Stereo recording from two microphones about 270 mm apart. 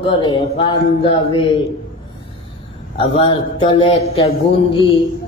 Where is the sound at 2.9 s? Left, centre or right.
Centre.